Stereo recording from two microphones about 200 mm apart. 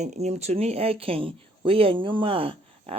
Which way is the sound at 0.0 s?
35° right (ahead or behind).